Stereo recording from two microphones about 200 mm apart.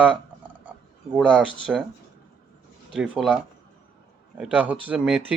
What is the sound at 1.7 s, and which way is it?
Speech, 5° right (ahead or behind).